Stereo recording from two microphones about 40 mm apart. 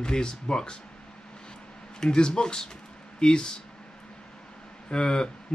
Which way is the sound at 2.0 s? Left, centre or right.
Centre.